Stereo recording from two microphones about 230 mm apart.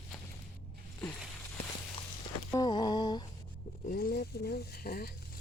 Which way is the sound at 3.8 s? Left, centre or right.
Left.